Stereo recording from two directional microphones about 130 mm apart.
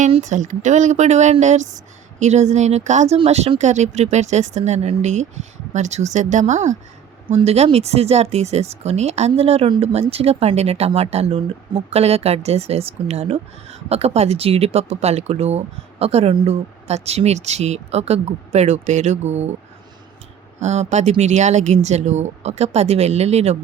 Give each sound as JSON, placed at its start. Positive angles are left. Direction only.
{"t": 0.2, "sound": "speech", "side_deg": -70}
{"t": 7.3, "sound": "speech", "side_deg": -55}
{"t": 16.5, "sound": "speech", "side_deg": -55}
{"t": 20.6, "sound": "speech", "side_deg": -60}